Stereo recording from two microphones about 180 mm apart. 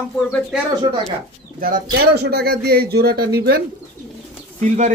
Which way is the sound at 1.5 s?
55° right (ahead or behind).